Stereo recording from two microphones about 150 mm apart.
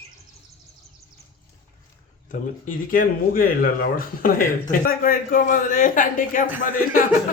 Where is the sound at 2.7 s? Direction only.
65° left (ahead or behind).